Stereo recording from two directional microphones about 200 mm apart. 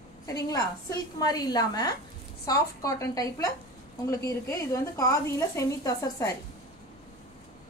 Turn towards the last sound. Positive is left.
turn(degrees=15)  # may be behind; listen again after turning